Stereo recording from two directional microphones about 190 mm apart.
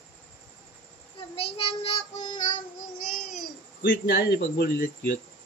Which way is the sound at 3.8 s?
55° left (ahead or behind).